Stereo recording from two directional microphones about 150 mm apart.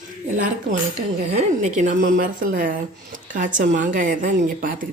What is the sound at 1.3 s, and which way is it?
Speech, 55° right (ahead or behind).